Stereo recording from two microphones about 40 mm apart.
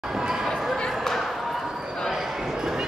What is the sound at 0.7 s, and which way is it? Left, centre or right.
Basketball bounce, centre.